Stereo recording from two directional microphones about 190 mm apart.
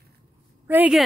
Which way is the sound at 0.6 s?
5° right (ahead or behind).